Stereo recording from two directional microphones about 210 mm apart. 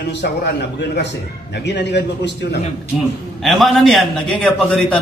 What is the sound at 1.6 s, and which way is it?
Speech, 55° left (ahead or behind).